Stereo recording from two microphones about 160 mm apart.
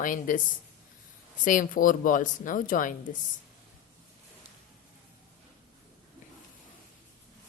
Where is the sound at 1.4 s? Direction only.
55° left (ahead or behind).